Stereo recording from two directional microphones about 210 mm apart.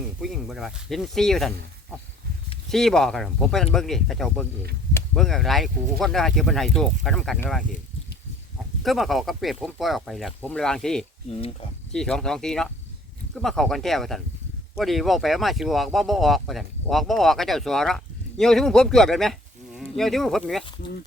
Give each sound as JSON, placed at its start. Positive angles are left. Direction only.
{"t": 0.2, "sound": "speech", "side_deg": 0}
{"t": 2.6, "sound": "speech", "side_deg": 0}
{"t": 8.8, "sound": "speech", "side_deg": 0}
{"t": 11.3, "sound": "speech", "side_deg": 25}
{"t": 11.9, "sound": "speech", "side_deg": 5}